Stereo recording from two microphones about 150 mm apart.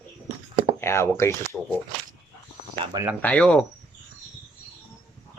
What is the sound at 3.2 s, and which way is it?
Speech, 10° left (ahead or behind).